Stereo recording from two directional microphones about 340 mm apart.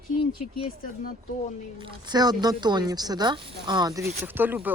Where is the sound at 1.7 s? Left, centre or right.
Centre.